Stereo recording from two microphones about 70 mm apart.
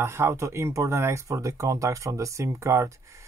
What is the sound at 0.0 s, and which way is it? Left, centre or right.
Speech, right.